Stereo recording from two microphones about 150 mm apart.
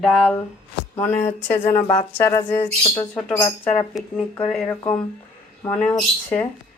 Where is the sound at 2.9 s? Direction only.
20° left (ahead or behind); by 4.2 s 5° left (ahead or behind).